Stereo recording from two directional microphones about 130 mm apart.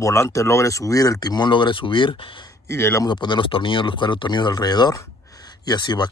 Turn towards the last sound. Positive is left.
turn(degrees=35)  # may be behind; listen again after turning